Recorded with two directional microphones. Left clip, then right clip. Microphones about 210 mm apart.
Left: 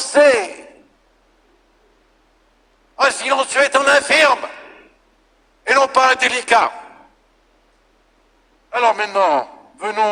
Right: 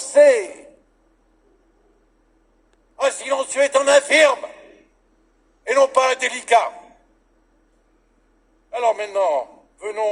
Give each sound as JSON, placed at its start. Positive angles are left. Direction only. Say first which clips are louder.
{"t": 0.0, "sound": "speech", "louder": "left 1 dB", "side_deg": 35}
{"t": 2.9, "sound": "a sound", "louder": "left 5 dB", "side_deg": 35}
{"t": 8.7, "sound": "a man's voice", "louder": "left 4 dB", "side_deg": 35}